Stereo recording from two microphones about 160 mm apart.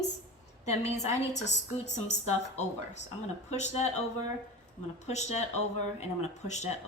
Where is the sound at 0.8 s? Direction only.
45° left (ahead or behind).